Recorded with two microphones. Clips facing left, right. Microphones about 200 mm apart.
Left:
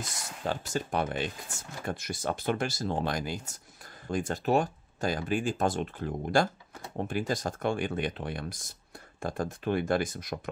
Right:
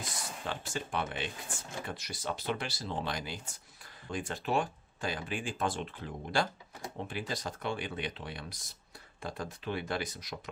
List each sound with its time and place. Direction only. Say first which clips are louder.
0.5 s speech: left 7 dB; 40° left (ahead or behind)